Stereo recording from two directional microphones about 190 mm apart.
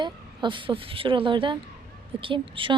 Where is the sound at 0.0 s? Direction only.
25° right (ahead or behind).